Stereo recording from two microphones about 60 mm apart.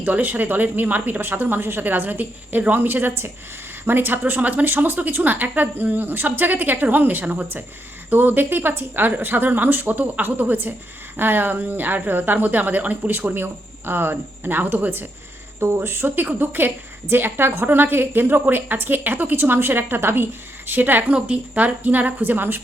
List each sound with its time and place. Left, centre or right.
0.0 s a woman's voice: right
15.6 s a woman's voice: right